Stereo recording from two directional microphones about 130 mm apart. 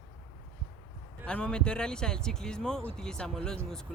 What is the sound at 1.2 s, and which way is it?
Speech, 5° left (ahead or behind).